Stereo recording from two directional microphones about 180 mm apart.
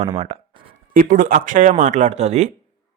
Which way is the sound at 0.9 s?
50° right (ahead or behind).